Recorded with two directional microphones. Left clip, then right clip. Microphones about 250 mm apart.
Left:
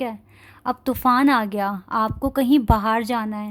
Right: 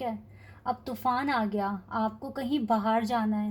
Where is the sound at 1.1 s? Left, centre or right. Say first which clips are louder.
Left 10 dB; left.